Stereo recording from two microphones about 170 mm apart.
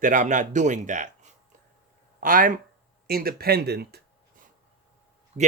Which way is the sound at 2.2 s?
55° right (ahead or behind).